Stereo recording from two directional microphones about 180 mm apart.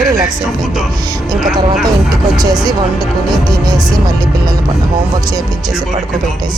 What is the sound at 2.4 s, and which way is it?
Speech, 20° right (ahead or behind).